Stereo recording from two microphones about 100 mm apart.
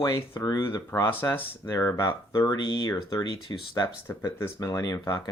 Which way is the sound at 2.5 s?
45° left (ahead or behind).